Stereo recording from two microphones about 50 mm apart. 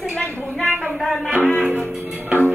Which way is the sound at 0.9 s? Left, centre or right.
Centre.